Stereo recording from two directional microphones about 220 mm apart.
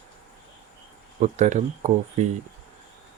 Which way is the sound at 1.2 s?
30° right (ahead or behind).